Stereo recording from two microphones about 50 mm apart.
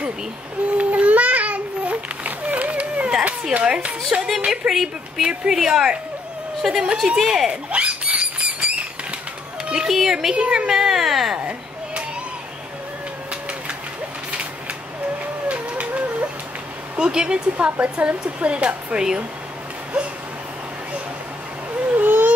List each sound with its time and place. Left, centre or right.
0.7 s babbling: right
3.5 s a child's voice: right
4.5 s a woman's voice: centre
7.7 s rodents: right
9.7 s a woman's voice: centre
10.3 s a woman's voice: centre
11.3 s children playing: right
13.3 s vehicle: right
14.3 s a sound: right
16.9 s a woman's voice: centre
21.7 s a sound: right